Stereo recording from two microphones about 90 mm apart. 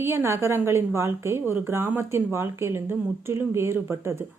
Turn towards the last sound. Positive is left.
turn(degrees=-25)  # may be behind; listen again after turning